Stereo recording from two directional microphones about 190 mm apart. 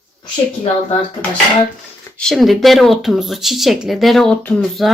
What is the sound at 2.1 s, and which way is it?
A woman's voice, centre (ahead or behind).